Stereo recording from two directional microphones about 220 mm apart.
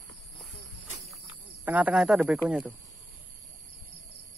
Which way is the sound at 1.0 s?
5° right (ahead or behind).